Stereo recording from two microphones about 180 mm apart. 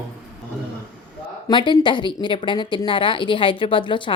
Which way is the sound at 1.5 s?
25° left (ahead or behind).